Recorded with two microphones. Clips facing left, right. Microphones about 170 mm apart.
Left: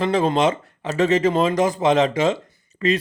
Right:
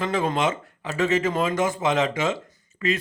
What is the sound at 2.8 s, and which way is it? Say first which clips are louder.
Speech: left 5 dB; 25° left (ahead or behind).